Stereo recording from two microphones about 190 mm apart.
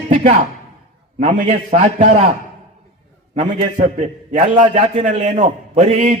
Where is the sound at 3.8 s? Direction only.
40° right (ahead or behind).